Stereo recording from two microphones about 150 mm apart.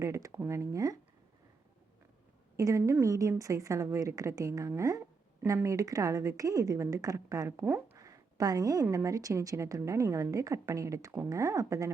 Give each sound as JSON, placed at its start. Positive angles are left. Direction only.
{"t": 0.0, "sound": "a woman's voice", "side_deg": -20}
{"t": 2.6, "sound": "a woman's voice", "side_deg": -20}